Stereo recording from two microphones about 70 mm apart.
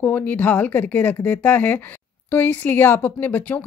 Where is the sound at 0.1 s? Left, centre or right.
Left.